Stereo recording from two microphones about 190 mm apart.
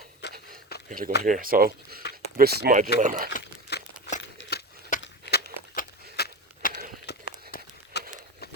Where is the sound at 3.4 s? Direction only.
60° left (ahead or behind).